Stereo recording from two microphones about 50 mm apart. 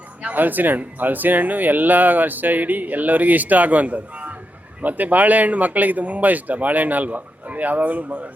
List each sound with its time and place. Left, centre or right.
0.2 s speech: right